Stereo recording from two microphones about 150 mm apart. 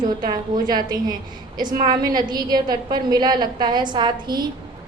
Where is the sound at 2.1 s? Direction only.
25° right (ahead or behind).